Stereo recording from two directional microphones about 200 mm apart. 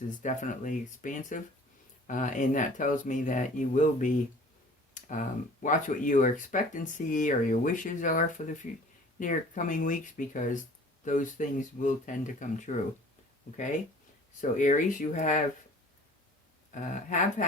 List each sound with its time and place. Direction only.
0.2 s speech: 40° left (ahead or behind)
4.9 s a sound: 40° left (ahead or behind)
5.6 s speech: 40° left (ahead or behind)
14.5 s speech: 40° left (ahead or behind)
16.7 s speech: 40° left (ahead or behind)